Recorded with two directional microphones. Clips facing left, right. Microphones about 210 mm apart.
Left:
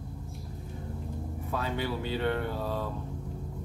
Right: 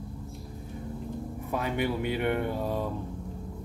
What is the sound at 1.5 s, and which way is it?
Speech, 15° right (ahead or behind).